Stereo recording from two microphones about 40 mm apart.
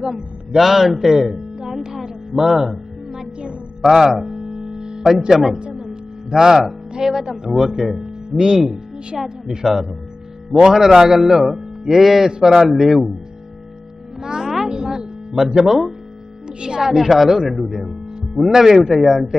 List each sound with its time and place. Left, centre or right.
0.0 s a man's voice: centre
1.0 s music: centre
3.8 s speech: centre
4.6 s music: centre
6.3 s speech: centre
9.2 s a man's voice: centre
14.2 s music: centre
16.4 s speech: right
16.8 s a man's voice: centre